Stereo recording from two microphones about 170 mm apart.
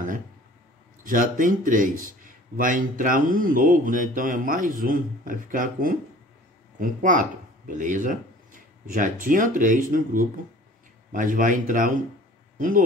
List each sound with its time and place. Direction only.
1.0 s a man's voice: 55° right (ahead or behind)